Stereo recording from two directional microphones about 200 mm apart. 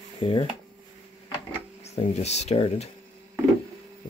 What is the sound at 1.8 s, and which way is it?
Speech, 35° left (ahead or behind).